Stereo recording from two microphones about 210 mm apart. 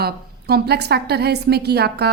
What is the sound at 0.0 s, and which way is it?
Speech, 50° right (ahead or behind).